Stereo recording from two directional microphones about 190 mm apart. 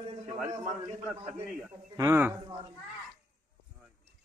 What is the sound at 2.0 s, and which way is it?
Speech, 10° right (ahead or behind).